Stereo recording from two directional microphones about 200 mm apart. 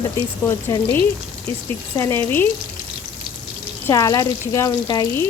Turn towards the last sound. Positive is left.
turn(degrees=20)  # may be behind; listen again after turning